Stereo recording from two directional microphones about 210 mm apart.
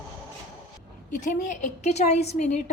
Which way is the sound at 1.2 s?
35° left (ahead or behind).